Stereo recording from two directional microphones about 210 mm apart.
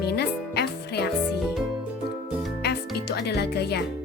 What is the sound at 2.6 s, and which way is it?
Music, 50° left (ahead or behind).